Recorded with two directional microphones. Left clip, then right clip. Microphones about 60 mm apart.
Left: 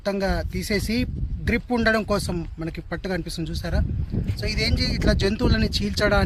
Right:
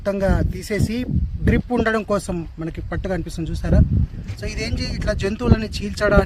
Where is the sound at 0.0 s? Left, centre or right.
Right.